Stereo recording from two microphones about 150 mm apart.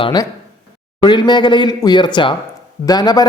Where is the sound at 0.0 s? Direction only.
30° left (ahead or behind).